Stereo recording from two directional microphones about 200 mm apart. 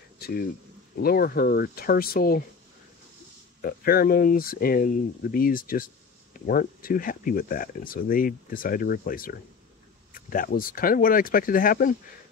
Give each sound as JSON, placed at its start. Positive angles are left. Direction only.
{"t": 0.2, "sound": "a sound", "side_deg": 50}
{"t": 0.9, "sound": "speech", "side_deg": 50}
{"t": 3.6, "sound": "speech", "side_deg": 50}